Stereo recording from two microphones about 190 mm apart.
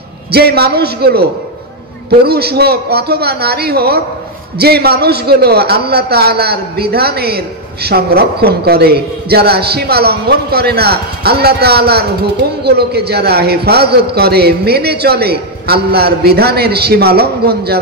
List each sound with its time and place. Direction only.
0.3 s a man's voice: 55° right (ahead or behind)